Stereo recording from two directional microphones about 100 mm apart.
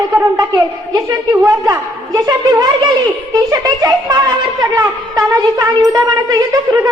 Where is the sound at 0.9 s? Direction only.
35° right (ahead or behind).